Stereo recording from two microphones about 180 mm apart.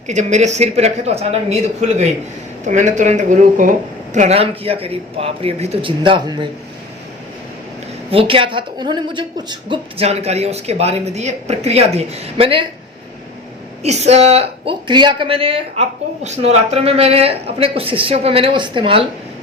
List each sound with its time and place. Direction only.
0.1 s a woman's voice: 40° right (ahead or behind)
6.0 s a man's voice: 25° right (ahead or behind)
8.1 s a woman's voice: 30° right (ahead or behind)
13.8 s a woman's voice: 40° right (ahead or behind)